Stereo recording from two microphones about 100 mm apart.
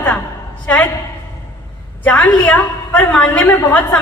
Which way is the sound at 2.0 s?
15° left (ahead or behind).